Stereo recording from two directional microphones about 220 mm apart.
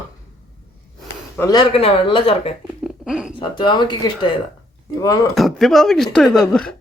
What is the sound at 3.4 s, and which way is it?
Speech, 20° left (ahead or behind).